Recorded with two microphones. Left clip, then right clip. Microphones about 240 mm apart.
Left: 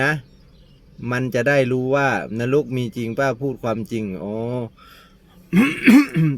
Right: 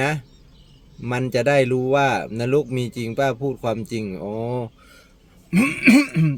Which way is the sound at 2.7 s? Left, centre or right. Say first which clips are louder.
Left 1 dB; centre.